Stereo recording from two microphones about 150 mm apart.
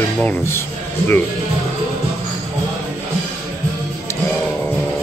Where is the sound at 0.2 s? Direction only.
15° left (ahead or behind).